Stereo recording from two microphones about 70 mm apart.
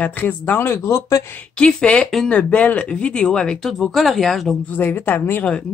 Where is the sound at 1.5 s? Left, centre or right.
Centre.